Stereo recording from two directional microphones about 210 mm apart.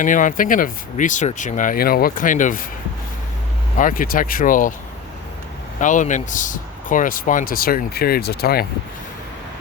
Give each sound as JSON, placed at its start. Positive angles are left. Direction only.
{"t": 0.0, "sound": "speech", "side_deg": 40}
{"t": 3.8, "sound": "speech", "side_deg": 40}
{"t": 5.8, "sound": "speech", "side_deg": 35}